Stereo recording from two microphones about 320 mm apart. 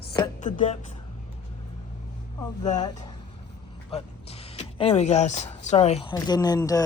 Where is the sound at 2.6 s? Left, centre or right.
Centre.